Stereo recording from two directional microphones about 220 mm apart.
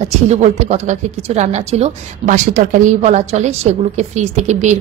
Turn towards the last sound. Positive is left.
turn(degrees=-35)  # may be behind; listen again after turning